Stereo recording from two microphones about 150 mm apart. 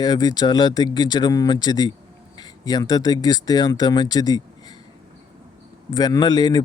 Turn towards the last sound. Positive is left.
turn(degrees=25)  # may be behind; listen again after turning